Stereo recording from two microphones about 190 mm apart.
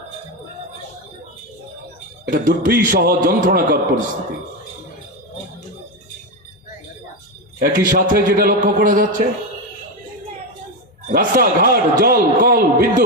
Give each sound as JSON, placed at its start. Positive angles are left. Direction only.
{"t": 2.2, "sound": "a man's voice", "side_deg": -50}
{"t": 7.6, "sound": "a man's voice", "side_deg": -50}
{"t": 11.1, "sound": "a man's voice", "side_deg": -50}